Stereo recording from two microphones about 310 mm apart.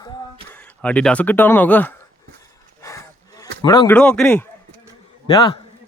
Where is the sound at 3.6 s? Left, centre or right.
Centre.